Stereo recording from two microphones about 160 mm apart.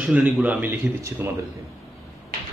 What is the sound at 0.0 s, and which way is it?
Speech, 10° right (ahead or behind).